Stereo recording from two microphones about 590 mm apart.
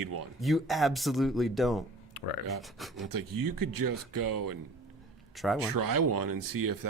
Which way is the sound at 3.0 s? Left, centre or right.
Right.